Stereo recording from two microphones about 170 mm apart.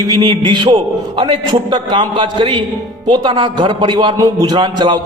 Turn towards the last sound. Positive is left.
turn(degrees=-25)  # may be behind; listen again after turning